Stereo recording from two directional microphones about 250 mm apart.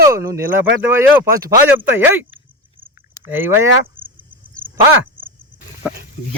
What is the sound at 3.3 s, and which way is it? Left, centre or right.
Speech, centre.